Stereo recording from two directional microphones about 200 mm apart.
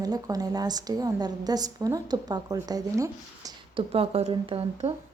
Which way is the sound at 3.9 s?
30° right (ahead or behind).